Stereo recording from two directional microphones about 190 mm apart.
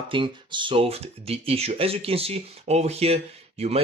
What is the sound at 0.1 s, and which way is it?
Speech, 25° right (ahead or behind).